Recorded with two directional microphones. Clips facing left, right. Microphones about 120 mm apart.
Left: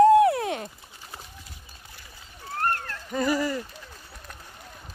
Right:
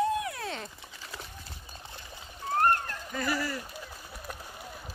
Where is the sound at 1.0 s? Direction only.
90° right.